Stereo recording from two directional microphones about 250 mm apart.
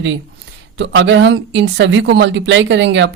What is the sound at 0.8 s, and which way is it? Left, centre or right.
A woman's voice, right.